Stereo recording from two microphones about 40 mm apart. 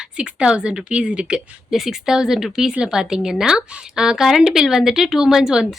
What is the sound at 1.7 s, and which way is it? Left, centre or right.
Speech, centre.